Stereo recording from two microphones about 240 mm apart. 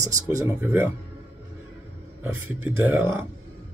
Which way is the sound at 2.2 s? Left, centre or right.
Centre.